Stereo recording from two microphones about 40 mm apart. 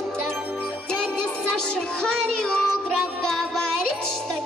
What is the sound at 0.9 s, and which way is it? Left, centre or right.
Music, centre.